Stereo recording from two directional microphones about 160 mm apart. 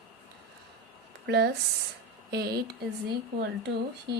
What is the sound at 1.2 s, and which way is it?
Speech, 90° right.